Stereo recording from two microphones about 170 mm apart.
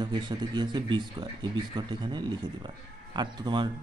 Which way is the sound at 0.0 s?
25° right (ahead or behind).